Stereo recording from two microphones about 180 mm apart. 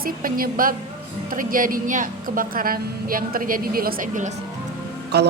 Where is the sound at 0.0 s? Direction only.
55° right (ahead or behind).